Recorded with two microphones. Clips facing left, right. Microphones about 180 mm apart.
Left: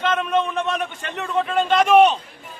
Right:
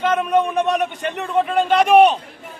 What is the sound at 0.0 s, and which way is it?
A man's voice, 10° right (ahead or behind).